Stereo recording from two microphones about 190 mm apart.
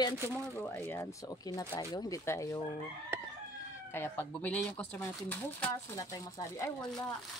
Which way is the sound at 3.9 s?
10° left (ahead or behind).